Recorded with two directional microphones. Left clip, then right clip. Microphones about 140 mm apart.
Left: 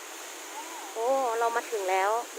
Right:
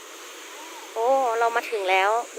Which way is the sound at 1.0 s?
20° right (ahead or behind).